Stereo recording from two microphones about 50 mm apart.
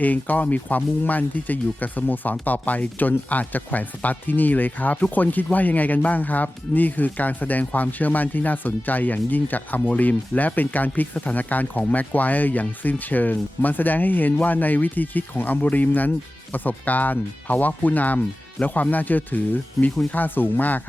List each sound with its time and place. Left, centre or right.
0.0 s speech: left